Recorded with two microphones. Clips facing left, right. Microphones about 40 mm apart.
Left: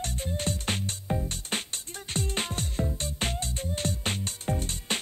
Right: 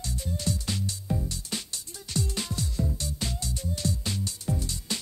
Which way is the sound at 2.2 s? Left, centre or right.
Left.